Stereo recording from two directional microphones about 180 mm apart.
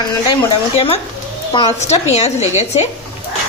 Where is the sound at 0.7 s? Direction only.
35° left (ahead or behind).